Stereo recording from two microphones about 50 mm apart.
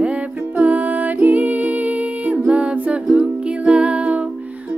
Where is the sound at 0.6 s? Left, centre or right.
Right.